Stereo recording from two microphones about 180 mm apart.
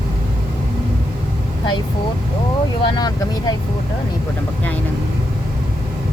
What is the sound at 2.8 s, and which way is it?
Speech, 25° left (ahead or behind).